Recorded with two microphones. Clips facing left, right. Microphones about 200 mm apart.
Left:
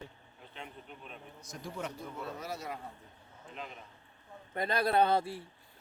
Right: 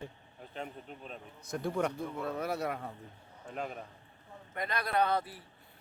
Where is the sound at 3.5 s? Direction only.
50° right (ahead or behind).